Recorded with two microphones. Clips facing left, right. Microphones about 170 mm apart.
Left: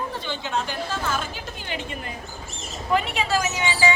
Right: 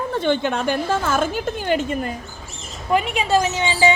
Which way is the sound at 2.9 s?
20° right (ahead or behind).